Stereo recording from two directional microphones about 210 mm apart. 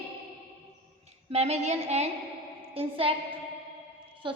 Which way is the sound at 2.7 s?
25° right (ahead or behind).